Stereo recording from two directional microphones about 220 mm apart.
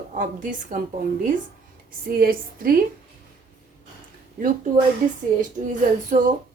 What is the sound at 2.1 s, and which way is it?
Speech, 40° right (ahead or behind).